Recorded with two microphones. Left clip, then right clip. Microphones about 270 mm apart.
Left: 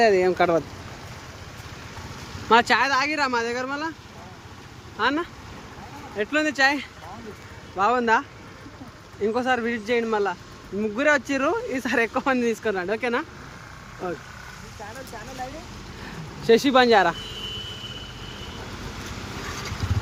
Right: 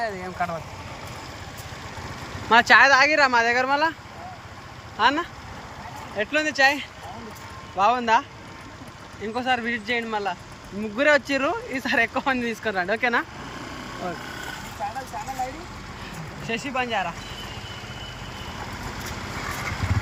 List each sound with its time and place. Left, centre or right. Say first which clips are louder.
0.0 s speech: left 9 dB; left
2.5 s speech: right 4 dB; centre
4.9 s speech: right 3 dB; centre
9.2 s speech: left 2 dB; centre
16.5 s speech: left 10 dB; left